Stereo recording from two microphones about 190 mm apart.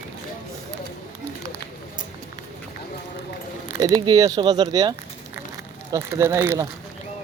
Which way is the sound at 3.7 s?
20° right (ahead or behind).